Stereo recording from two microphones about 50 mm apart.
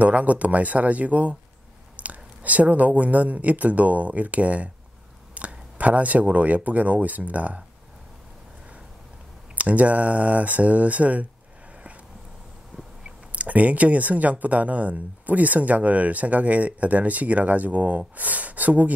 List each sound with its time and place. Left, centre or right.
0.0 s speech: right
9.6 s speech: right
13.0 s speech: right